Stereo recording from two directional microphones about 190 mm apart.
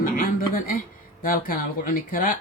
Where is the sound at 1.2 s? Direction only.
45° left (ahead or behind).